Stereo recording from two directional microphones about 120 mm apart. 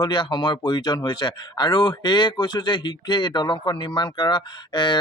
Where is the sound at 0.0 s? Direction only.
40° left (ahead or behind).